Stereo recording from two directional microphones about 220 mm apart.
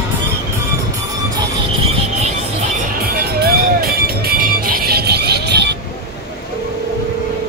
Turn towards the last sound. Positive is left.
turn(degrees=-50)  # may be behind; listen again after turning